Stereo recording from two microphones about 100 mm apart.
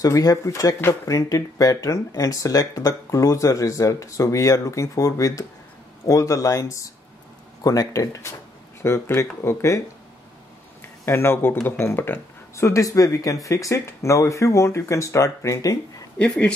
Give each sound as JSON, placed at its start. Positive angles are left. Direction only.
{"t": 0.0, "sound": "speech", "side_deg": 35}
{"t": 10.8, "sound": "a sound", "side_deg": 25}
{"t": 11.8, "sound": "speech", "side_deg": 20}
{"t": 16.2, "sound": "speech", "side_deg": 10}